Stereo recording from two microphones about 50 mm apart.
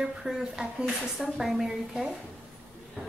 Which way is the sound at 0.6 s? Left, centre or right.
Right.